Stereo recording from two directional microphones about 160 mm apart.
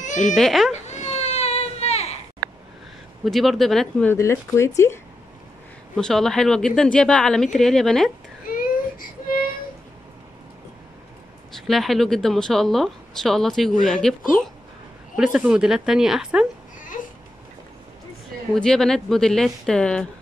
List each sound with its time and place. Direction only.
0.4 s speech: centre (ahead or behind)
0.8 s baby cry: 45° left (ahead or behind)
3.3 s speech: centre (ahead or behind)
4.1 s speech: 15° left (ahead or behind)
5.9 s speech: 5° left (ahead or behind)
8.5 s baby cry: 60° left (ahead or behind)
11.5 s speech: centre (ahead or behind)
18.5 s speech: 5° left (ahead or behind)